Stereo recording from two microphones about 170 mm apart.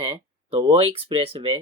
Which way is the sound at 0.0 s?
35° right (ahead or behind).